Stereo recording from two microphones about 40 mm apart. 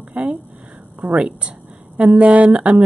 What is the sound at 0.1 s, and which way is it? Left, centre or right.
Speech, right.